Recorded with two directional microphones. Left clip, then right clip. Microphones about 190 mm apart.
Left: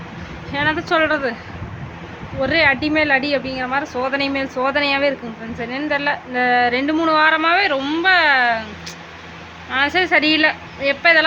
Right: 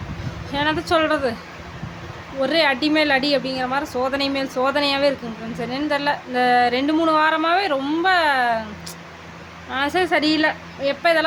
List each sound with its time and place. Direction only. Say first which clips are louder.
0.5 s a woman's voice: left 2 dB; 20° right (ahead or behind)
2.4 s a woman's voice: left 2 dB; 20° right (ahead or behind)
9.7 s a woman's voice: left 4 dB; 15° right (ahead or behind)